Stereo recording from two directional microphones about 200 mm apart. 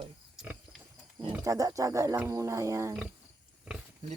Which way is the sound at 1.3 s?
15° right (ahead or behind).